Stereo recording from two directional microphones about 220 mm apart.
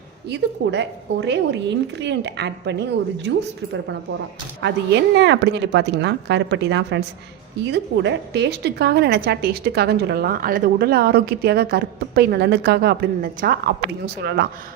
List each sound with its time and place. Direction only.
0.3 s a woman's voice: 50° right (ahead or behind)
4.6 s a woman's voice: 50° right (ahead or behind)